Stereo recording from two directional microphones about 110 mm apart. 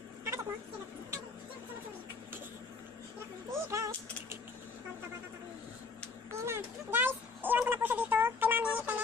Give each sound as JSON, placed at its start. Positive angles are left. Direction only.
{"t": 0.2, "sound": "a sound", "side_deg": -25}
{"t": 3.5, "sound": "speech", "side_deg": -25}
{"t": 6.4, "sound": "speech", "side_deg": -20}